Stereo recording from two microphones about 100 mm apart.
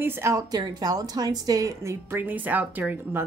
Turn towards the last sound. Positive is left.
turn(degrees=-20)  # may be behind; listen again after turning